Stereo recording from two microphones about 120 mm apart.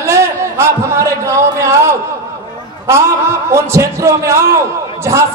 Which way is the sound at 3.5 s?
25° right (ahead or behind).